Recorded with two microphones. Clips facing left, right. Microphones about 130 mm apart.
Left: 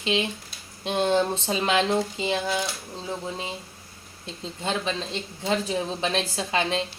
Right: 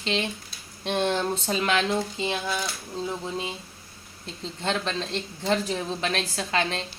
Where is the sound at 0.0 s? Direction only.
10° left (ahead or behind).